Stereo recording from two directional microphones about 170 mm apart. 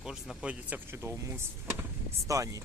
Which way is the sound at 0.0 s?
5° right (ahead or behind).